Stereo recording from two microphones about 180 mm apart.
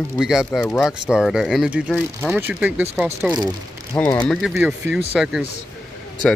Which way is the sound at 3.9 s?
20° left (ahead or behind).